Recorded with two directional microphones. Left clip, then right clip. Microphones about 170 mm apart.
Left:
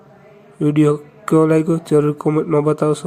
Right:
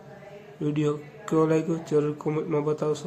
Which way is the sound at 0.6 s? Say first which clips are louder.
Left 12 dB; 40° left (ahead or behind).